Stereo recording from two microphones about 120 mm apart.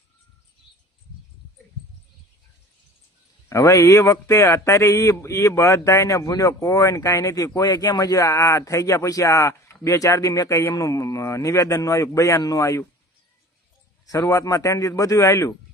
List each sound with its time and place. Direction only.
3.5 s speech: 25° left (ahead or behind)
14.1 s speech: 25° left (ahead or behind)